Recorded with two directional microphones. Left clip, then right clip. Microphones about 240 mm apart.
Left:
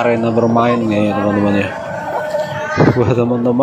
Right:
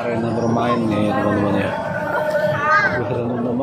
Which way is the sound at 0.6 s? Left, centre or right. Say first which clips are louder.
Left 5 dB; left.